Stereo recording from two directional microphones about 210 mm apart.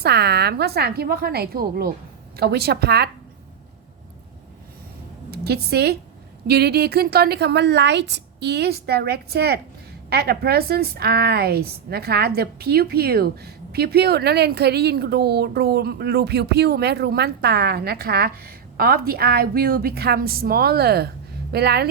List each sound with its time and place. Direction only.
0.0 s a woman's voice: 50° right (ahead or behind)
5.3 s a woman's voice: 50° right (ahead or behind)